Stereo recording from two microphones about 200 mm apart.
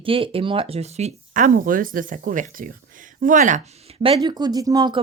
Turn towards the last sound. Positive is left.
turn(degrees=-20)  # may be behind; listen again after turning